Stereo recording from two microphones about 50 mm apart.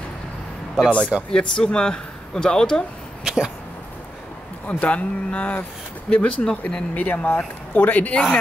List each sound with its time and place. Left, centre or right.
0.8 s speech: centre
1.3 s speech: centre
3.3 s speech: centre
4.6 s speech: left